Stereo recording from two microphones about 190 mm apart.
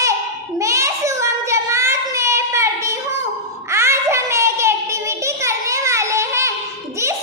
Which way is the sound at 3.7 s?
15° right (ahead or behind).